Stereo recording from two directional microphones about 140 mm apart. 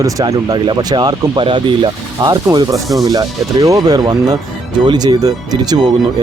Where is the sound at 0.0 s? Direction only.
25° right (ahead or behind).